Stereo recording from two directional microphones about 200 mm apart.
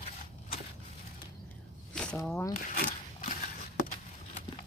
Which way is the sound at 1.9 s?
5° left (ahead or behind).